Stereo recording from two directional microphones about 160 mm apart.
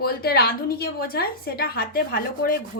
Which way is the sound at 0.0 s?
75° left (ahead or behind).